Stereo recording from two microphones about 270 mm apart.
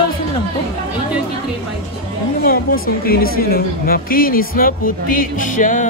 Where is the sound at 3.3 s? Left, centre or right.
Left.